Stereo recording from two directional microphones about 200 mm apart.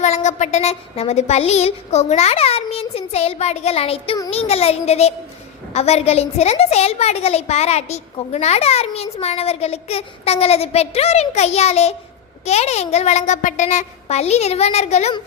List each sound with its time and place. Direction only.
0.0 s a woman's voice: 35° left (ahead or behind)